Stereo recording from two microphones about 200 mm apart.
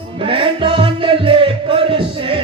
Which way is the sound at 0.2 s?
25° right (ahead or behind).